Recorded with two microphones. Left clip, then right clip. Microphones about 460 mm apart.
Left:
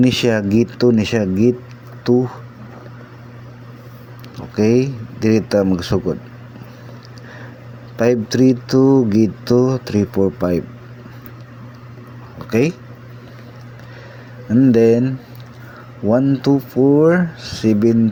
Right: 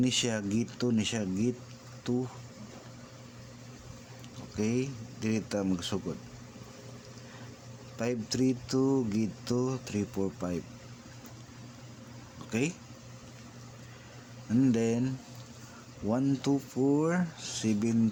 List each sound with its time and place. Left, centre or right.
0.0 s speech: right
4.4 s speech: right
7.9 s speech: right
12.5 s speech: right
14.6 s speech: right